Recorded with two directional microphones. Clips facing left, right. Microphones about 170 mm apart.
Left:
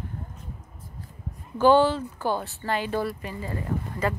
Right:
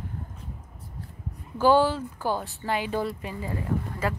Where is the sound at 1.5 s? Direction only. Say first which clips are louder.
Left 2 dB; 10° right (ahead or behind).